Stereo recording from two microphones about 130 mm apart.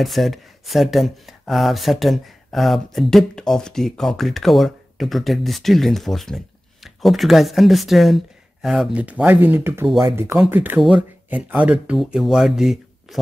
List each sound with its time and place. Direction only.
0.0 s speech: centre (ahead or behind)